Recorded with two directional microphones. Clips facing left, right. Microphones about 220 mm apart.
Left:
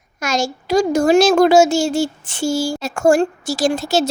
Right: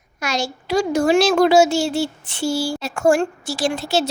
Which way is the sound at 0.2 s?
45° left (ahead or behind).